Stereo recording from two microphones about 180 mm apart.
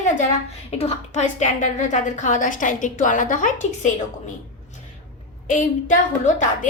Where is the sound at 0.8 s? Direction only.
35° left (ahead or behind).